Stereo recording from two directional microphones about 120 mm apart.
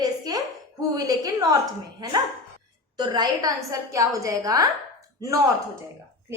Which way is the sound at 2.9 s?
35° right (ahead or behind).